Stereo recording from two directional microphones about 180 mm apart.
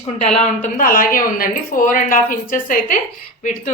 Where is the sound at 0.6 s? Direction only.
50° left (ahead or behind).